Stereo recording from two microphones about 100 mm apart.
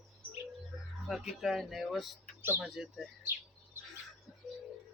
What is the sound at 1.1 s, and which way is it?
Speech, centre (ahead or behind).